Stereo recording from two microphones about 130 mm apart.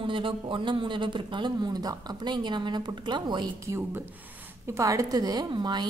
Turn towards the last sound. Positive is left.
turn(degrees=-35)  # may be behind; listen again after turning